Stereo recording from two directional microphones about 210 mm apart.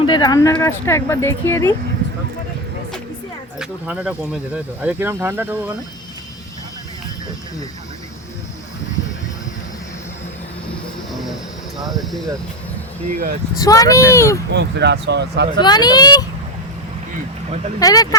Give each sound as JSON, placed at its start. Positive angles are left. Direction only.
{"t": 0.0, "sound": "speech", "side_deg": 20}
{"t": 3.6, "sound": "speech", "side_deg": -5}
{"t": 11.1, "sound": "a sound", "side_deg": 0}
{"t": 11.8, "sound": "speech", "side_deg": 0}
{"t": 13.1, "sound": "speech", "side_deg": -45}
{"t": 13.7, "sound": "speech", "side_deg": 15}
{"t": 14.5, "sound": "speech", "side_deg": -55}
{"t": 15.6, "sound": "speech", "side_deg": 20}
{"t": 17.7, "sound": "speech", "side_deg": 15}